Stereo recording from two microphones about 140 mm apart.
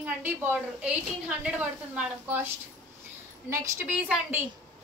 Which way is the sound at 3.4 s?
20° right (ahead or behind).